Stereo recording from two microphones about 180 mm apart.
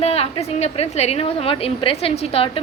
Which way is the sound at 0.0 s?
35° left (ahead or behind).